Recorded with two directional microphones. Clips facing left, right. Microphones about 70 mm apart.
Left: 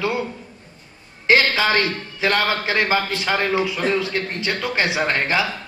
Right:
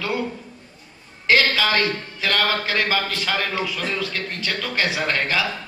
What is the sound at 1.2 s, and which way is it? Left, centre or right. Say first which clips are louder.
A man's voice: left 2 dB; left.